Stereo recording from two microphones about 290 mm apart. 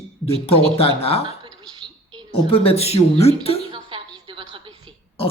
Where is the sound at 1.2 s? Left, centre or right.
Centre.